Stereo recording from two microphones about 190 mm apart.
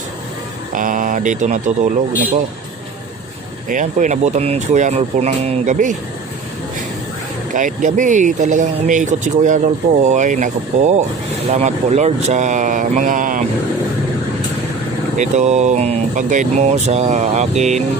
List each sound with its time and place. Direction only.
0.7 s speech: 45° right (ahead or behind)
3.7 s speech: 40° right (ahead or behind)
7.5 s speech: 40° right (ahead or behind)
15.2 s speech: 40° right (ahead or behind)